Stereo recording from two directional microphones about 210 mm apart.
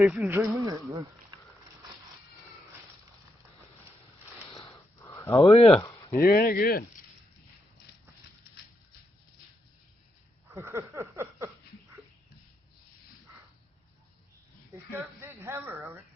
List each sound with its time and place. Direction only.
0.0 s speech: 5° right (ahead or behind)
4.7 s wheeze: 15° left (ahead or behind)
5.5 s speech: 30° left (ahead or behind)
5.8 s a sound: 15° left (ahead or behind)
6.1 s speech: 45° left (ahead or behind)
10.5 s a sound: 10° right (ahead or behind)
14.9 s speech: 10° right (ahead or behind)